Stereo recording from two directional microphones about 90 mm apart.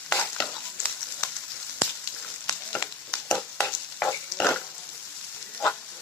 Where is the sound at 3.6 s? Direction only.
15° left (ahead or behind).